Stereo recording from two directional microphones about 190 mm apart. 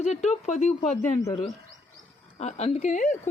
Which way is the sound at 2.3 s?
35° left (ahead or behind).